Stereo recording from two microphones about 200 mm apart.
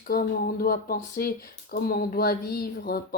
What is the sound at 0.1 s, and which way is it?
Speech, 50° left (ahead or behind).